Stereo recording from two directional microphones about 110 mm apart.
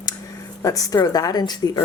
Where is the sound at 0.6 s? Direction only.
30° left (ahead or behind).